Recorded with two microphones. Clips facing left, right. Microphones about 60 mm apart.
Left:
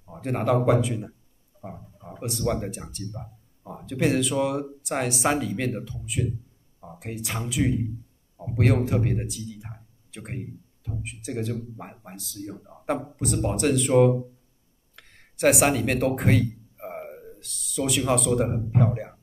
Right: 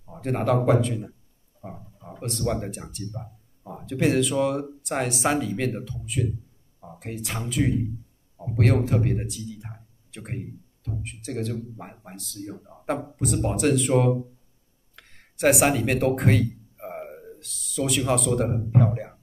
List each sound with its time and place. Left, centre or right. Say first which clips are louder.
0.0 s speech: right 1 dB; centre
8.4 s a sound: even; centre
11.1 s speech: even; centre
12.4 s speech: even; centre
12.6 s speech: left 1 dB; centre